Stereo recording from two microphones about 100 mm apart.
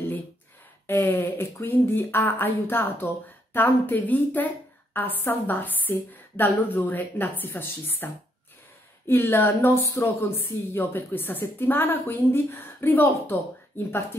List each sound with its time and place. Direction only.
0.8 s speech: 20° left (ahead or behind)